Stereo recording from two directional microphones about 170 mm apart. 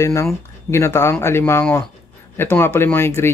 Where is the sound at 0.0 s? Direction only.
15° left (ahead or behind).